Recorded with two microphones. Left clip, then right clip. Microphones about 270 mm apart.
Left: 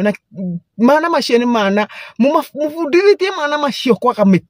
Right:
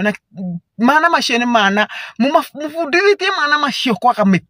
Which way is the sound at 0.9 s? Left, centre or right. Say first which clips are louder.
Even; centre.